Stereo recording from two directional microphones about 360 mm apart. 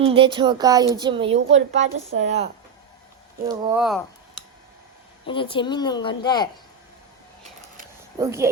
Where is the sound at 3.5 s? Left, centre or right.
Centre.